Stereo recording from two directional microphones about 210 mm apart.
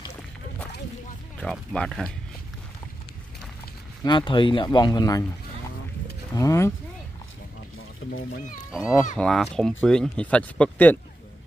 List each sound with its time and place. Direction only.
1.4 s speech: 5° left (ahead or behind)
4.0 s speech: 20° left (ahead or behind)
6.3 s speech: 15° left (ahead or behind)
8.0 s speech: 65° left (ahead or behind)
8.7 s speech: centre (ahead or behind)